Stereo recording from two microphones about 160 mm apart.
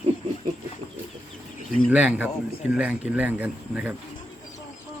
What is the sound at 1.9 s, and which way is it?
Speech, 10° right (ahead or behind).